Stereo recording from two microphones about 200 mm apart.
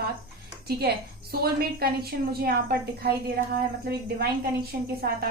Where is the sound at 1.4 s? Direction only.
50° right (ahead or behind).